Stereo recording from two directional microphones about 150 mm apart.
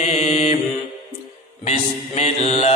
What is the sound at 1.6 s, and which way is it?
Mantra, 45° left (ahead or behind).